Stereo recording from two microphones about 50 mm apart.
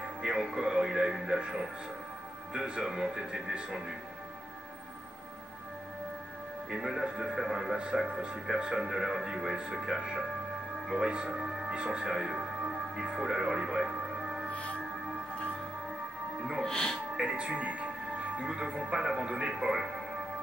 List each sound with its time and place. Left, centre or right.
0.4 s speech: centre
6.7 s speech: centre
12.2 s music: centre
14.5 s music: left
16.6 s speech: centre
17.2 s speech: right